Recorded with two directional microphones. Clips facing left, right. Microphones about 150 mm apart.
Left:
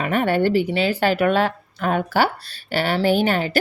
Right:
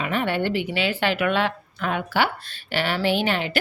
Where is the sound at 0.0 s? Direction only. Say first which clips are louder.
Left 5 dB; 45° left (ahead or behind).